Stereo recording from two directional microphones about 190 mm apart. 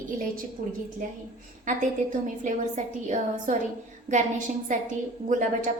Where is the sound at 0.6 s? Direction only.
50° right (ahead or behind).